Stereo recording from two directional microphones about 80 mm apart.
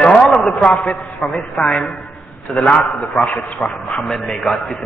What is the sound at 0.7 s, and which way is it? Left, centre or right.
A man's voice, centre.